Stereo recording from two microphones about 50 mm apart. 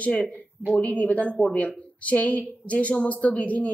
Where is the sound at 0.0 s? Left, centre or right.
Left.